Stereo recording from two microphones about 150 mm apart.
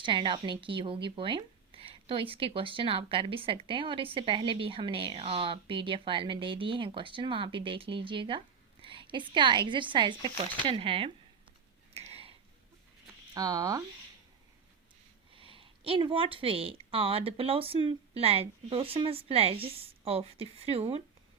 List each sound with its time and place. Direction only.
0.0 s a woman's voice: 30° right (ahead or behind)
11.9 s a sound: 40° right (ahead or behind)
13.3 s speech: 25° right (ahead or behind)
15.3 s speech: 35° right (ahead or behind)